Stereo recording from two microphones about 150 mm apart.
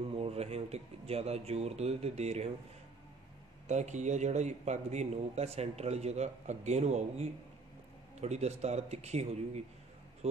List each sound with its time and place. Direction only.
0.1 s a man's voice: 40° right (ahead or behind)
3.6 s a man's voice: 50° right (ahead or behind)